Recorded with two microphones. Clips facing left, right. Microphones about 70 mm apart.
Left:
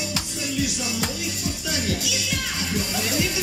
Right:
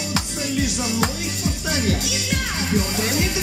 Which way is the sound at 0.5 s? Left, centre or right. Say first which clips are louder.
Right 4 dB; right.